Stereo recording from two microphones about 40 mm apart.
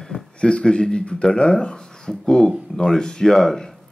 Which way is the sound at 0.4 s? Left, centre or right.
Left.